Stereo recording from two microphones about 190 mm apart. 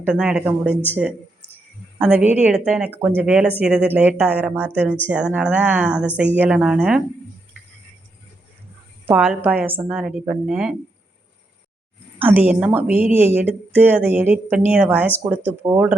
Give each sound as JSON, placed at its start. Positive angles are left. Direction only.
{"t": 0.0, "sound": "a woman's voice", "side_deg": -5}
{"t": 9.0, "sound": "a woman's voice", "side_deg": -5}
{"t": 12.2, "sound": "speech", "side_deg": -10}